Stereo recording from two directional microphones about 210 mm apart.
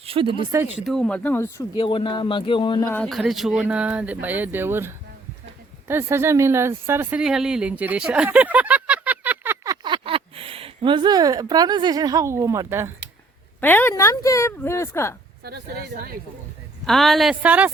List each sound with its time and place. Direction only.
0.0 s speech: 25° right (ahead or behind)
0.9 s speech: 5° left (ahead or behind); by 2.9 s 20° left (ahead or behind)
2.9 s speech: 5° left (ahead or behind)
9.8 s speech: 25° right (ahead or behind)
13.6 s speech: 10° left (ahead or behind)
16.8 s speech: centre (ahead or behind)